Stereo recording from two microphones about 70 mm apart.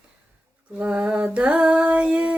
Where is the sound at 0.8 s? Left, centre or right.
Centre.